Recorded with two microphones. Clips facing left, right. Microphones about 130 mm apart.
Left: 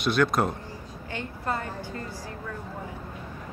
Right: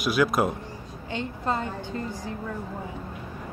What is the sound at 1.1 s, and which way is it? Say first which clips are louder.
A woman's voice: right 3 dB; 20° right (ahead or behind).